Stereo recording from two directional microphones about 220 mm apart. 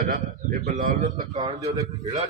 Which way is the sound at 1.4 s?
20° right (ahead or behind).